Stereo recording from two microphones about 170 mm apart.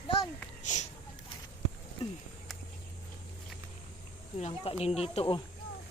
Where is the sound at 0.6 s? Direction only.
45° left (ahead or behind).